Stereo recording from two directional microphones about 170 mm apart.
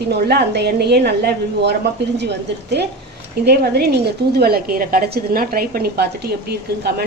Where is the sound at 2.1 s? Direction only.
80° right.